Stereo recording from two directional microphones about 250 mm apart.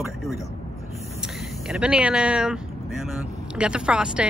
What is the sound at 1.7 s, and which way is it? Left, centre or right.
Speech, centre.